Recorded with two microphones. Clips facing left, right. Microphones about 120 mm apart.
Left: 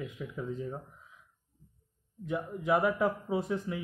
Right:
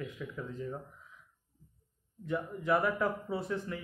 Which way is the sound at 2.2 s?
15° left (ahead or behind).